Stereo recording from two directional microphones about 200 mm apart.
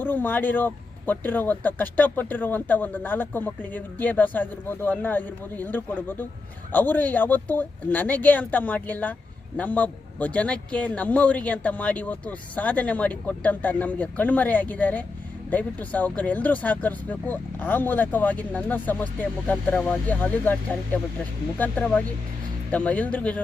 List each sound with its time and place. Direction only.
0.0 s speech: 10° left (ahead or behind)